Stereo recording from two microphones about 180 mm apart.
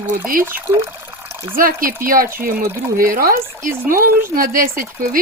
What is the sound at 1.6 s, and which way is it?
Speech, 50° right (ahead or behind).